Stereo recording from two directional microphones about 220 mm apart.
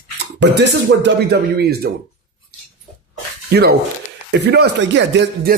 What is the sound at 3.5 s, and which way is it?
Speech, 45° right (ahead or behind).